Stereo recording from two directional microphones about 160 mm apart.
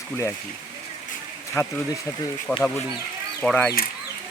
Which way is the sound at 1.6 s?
15° left (ahead or behind).